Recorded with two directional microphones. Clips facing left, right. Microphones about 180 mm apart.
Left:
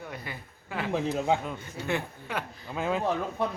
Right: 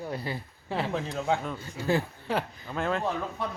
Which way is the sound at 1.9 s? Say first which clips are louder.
Right 5 dB; 35° right (ahead or behind).